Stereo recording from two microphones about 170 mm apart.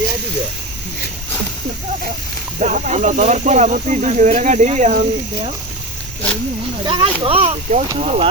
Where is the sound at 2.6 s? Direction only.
45° right (ahead or behind).